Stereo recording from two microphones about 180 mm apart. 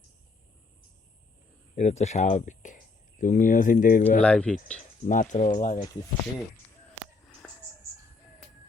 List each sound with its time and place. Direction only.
1.7 s speech: 40° left (ahead or behind)
4.2 s speech: 5° left (ahead or behind)
5.0 s speech: 45° left (ahead or behind)